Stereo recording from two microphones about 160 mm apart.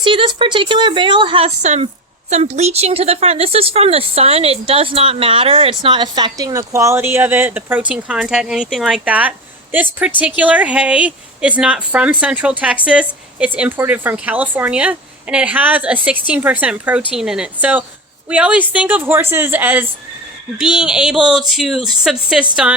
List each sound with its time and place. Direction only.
0.0 s a woman's voice: 30° right (ahead or behind); by 22.4 s 5° right (ahead or behind)